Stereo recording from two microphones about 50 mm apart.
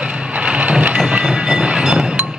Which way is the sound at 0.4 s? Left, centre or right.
Right.